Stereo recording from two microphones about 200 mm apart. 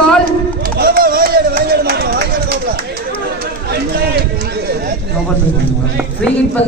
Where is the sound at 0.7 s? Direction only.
50° right (ahead or behind).